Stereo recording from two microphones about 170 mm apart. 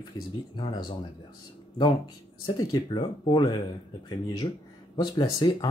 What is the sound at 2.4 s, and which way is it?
Speech, 25° left (ahead or behind).